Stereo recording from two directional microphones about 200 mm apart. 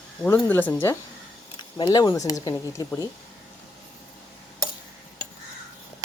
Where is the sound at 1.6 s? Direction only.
20° left (ahead or behind).